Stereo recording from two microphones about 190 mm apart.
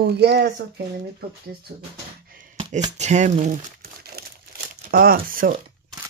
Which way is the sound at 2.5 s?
30° right (ahead or behind).